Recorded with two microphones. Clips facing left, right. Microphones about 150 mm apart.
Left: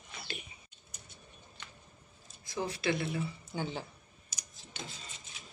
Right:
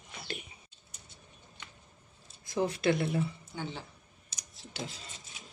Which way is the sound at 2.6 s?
50° right (ahead or behind).